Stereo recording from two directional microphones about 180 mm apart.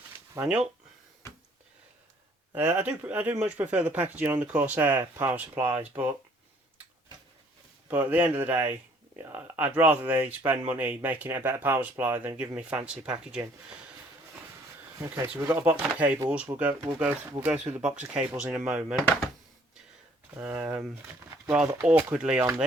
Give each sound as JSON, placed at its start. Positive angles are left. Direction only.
{"t": 0.3, "sound": "speech", "side_deg": -5}
{"t": 2.5, "sound": "speech", "side_deg": -10}
{"t": 7.9, "sound": "speech", "side_deg": -10}
{"t": 14.9, "sound": "speech", "side_deg": -15}
{"t": 18.0, "sound": "speech", "side_deg": -5}
{"t": 20.3, "sound": "speech", "side_deg": -5}